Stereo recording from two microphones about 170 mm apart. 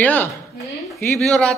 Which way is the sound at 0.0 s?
10° left (ahead or behind).